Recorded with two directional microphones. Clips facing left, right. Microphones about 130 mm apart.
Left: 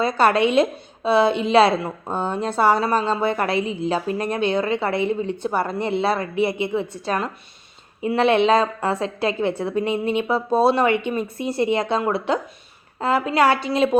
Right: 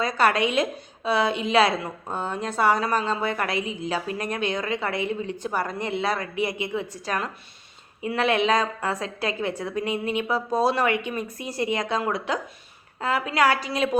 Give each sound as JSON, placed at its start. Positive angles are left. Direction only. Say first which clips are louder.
{"t": 0.0, "sound": "a woman's voice", "louder": "left 4 dB", "side_deg": 30}